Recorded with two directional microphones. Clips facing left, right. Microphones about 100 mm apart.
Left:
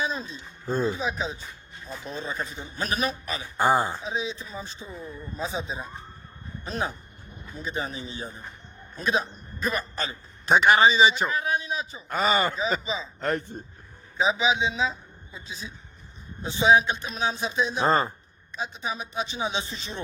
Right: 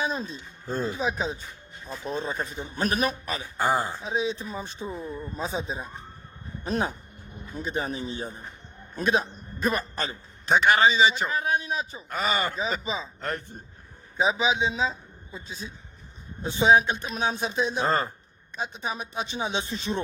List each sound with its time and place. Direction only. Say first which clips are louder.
0.0 s a sound: right 1 dB; 50° right (ahead or behind)
0.9 s speech: right 2 dB; 50° right (ahead or behind)
3.6 s speech: left 3 dB; 20° left (ahead or behind)
4.0 s a man's voice: right 3 dB; 50° right (ahead or behind)
10.5 s a man's voice: left 2 dB; 15° left (ahead or behind)
11.3 s speech: right 1 dB; 45° right (ahead or behind)
12.0 s speech: left 4 dB; 30° left (ahead or behind)
12.8 s speech: even; 45° right (ahead or behind)
13.1 s speech: left 5 dB; 20° left (ahead or behind)
14.3 s a man's voice: left 1 dB; 40° right (ahead or behind)
17.8 s speech: left 5 dB; 30° left (ahead or behind)
18.5 s speech: even; 50° right (ahead or behind)